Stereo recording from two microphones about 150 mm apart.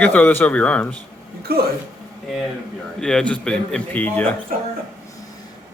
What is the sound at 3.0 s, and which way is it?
A man's voice, 5° left (ahead or behind).